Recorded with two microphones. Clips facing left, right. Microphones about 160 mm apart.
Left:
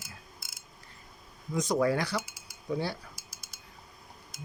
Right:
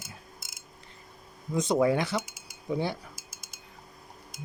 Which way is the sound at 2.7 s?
20° right (ahead or behind).